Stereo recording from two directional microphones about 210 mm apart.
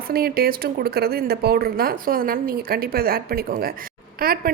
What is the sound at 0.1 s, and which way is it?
A woman's voice, 45° right (ahead or behind).